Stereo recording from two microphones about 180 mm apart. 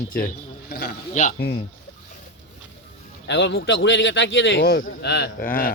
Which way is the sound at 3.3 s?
75° left (ahead or behind).